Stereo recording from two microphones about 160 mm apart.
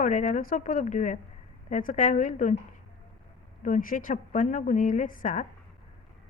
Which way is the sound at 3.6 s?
55° left (ahead or behind).